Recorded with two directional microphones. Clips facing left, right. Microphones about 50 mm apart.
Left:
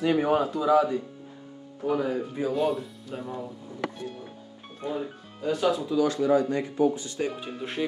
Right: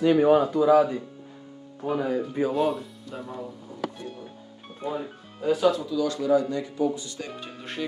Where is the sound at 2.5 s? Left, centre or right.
Centre.